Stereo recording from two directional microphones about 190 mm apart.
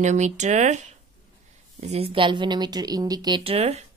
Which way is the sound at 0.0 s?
40° right (ahead or behind).